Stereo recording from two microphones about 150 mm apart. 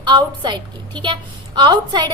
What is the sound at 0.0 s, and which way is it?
A woman's voice, 30° right (ahead or behind).